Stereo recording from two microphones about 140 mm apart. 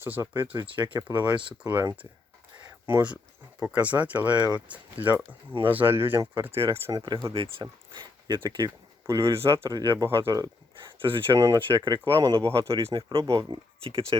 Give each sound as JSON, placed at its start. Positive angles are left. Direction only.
{"t": 0.0, "sound": "speech", "side_deg": -15}
{"t": 0.9, "sound": "speech", "side_deg": -30}
{"t": 1.7, "sound": "speech", "side_deg": -15}
{"t": 11.3, "sound": "speech", "side_deg": -20}
{"t": 12.8, "sound": "speech", "side_deg": -35}